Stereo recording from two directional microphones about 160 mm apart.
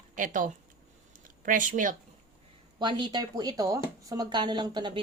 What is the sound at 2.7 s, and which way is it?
Speech, 30° right (ahead or behind).